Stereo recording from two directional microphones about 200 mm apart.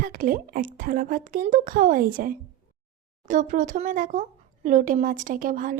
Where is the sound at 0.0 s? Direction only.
45° right (ahead or behind).